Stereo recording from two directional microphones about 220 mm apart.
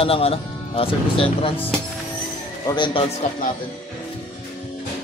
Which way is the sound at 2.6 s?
20° left (ahead or behind).